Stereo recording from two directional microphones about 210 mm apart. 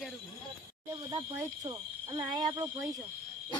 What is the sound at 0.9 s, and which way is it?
Speech, 20° right (ahead or behind).